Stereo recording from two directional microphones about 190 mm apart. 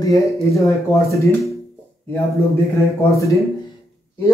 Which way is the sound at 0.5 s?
15° left (ahead or behind).